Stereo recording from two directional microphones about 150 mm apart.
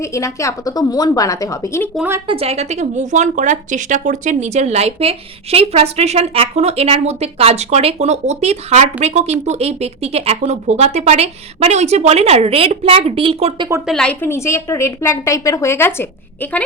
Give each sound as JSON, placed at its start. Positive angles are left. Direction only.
{"t": 0.0, "sound": "speech", "side_deg": 20}
{"t": 2.2, "sound": "speech", "side_deg": -40}
{"t": 13.8, "sound": "a woman's voice", "side_deg": 5}